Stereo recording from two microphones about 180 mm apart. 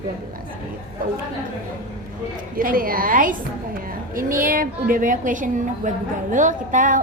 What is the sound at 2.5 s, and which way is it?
A woman's voice, 50° right (ahead or behind).